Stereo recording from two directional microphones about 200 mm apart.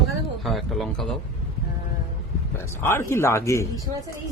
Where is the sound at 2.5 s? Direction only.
10° left (ahead or behind).